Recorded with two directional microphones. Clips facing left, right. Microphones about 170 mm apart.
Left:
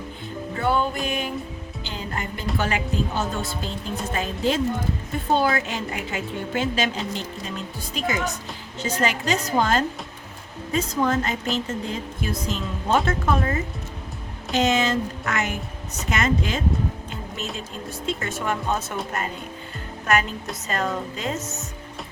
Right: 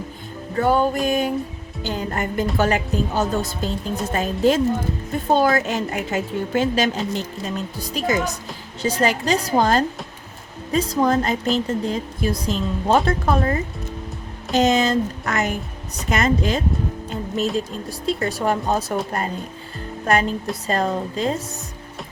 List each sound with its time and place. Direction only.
0.6 s speech: 40° right (ahead or behind)
1.0 s music: 40° right (ahead or behind)
1.8 s speech: 45° right (ahead or behind)